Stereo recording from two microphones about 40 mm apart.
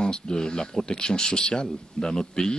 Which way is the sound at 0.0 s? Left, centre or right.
Centre.